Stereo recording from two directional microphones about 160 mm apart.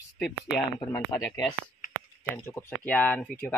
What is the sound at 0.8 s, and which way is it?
Speech, 15° left (ahead or behind).